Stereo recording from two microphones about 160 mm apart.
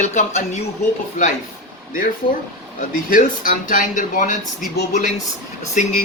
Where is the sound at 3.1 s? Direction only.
60° left (ahead or behind).